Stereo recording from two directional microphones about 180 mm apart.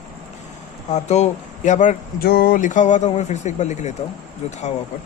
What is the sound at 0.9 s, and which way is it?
Speech, 40° left (ahead or behind).